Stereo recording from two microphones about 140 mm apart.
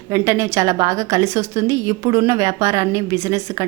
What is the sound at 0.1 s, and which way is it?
A woman's voice, 20° right (ahead or behind).